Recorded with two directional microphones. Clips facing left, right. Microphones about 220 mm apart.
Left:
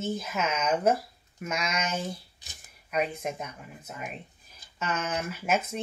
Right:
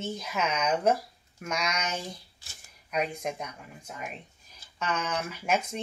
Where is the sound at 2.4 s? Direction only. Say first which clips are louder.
Left 2 dB; 20° left (ahead or behind).